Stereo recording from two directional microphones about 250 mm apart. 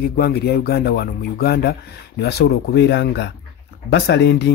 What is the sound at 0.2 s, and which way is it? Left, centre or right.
Speech, left.